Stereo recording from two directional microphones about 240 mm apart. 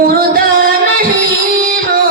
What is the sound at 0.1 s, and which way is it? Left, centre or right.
Music, right.